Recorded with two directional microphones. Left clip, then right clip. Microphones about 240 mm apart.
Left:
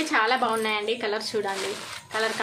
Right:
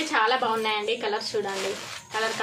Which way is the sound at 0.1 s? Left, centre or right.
Left.